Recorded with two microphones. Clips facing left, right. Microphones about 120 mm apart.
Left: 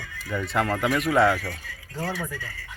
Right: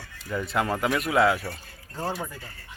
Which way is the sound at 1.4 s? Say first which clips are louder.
Left 2 dB; 90° left.